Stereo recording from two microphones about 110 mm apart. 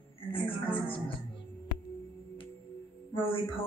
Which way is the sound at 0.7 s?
55° left (ahead or behind).